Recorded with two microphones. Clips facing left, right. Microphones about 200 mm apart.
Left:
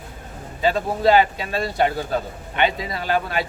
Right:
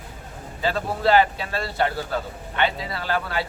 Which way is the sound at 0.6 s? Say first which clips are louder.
Left 4 dB; 15° left (ahead or behind).